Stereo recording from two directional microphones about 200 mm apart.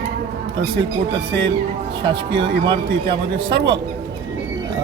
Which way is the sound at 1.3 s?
60° right (ahead or behind).